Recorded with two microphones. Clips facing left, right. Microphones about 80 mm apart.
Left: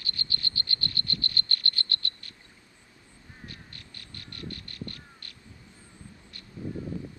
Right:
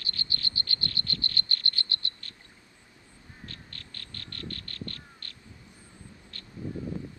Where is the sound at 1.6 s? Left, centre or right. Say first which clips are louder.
Left 1 dB; right.